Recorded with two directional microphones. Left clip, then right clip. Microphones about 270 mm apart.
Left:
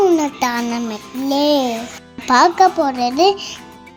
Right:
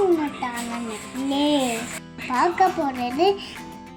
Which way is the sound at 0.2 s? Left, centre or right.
Left.